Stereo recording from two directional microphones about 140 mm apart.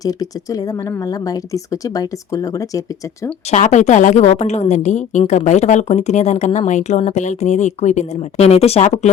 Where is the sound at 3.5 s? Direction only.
55° left (ahead or behind).